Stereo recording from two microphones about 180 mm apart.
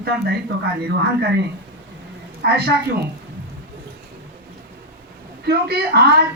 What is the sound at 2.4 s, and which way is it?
Speech, 60° right (ahead or behind).